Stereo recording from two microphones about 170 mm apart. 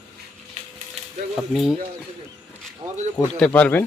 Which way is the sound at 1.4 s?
Centre (ahead or behind).